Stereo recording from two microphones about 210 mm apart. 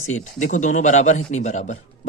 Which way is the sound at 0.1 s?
35° left (ahead or behind).